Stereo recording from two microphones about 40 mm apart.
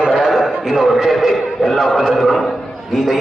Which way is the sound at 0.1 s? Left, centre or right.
Centre.